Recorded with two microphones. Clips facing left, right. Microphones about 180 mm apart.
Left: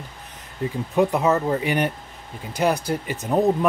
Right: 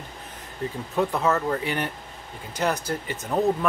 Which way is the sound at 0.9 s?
15° left (ahead or behind).